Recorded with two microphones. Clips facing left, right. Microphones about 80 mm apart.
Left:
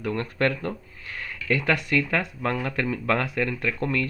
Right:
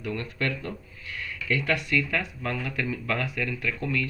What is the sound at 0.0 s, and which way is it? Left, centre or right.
Speech, left.